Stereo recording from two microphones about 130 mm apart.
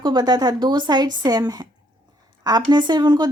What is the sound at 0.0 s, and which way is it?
Speech, 35° right (ahead or behind).